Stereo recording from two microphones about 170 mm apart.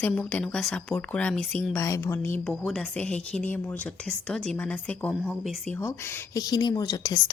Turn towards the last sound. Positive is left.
turn(degrees=25)  # may be behind; listen again after turning